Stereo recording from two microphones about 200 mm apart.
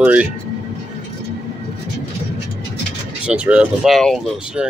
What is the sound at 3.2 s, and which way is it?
Speech, 5° right (ahead or behind).